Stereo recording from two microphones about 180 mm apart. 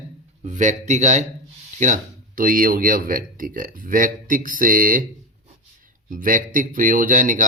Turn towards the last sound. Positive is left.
turn(degrees=-50)  # may be behind; listen again after turning